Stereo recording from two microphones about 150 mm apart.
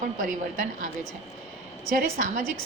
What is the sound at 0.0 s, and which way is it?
Speech, 65° right (ahead or behind).